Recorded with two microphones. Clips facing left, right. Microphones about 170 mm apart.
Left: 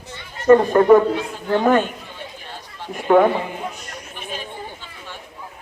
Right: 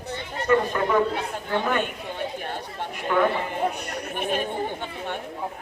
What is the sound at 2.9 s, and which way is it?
Speech, 50° left (ahead or behind).